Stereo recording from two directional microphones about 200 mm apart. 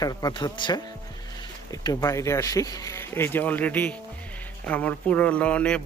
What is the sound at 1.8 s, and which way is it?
Speech, 20° left (ahead or behind).